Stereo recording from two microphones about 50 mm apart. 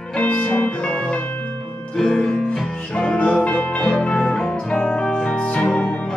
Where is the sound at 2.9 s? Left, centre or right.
Left.